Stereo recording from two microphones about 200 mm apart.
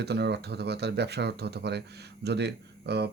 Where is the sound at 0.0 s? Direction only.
55° right (ahead or behind).